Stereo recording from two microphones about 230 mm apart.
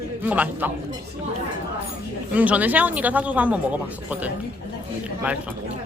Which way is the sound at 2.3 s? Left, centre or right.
Centre.